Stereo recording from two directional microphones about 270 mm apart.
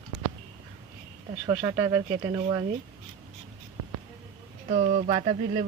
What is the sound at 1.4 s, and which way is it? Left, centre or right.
Speech, centre.